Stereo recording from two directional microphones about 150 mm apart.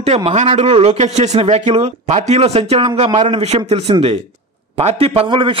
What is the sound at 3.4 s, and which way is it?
A man's voice, 45° right (ahead or behind).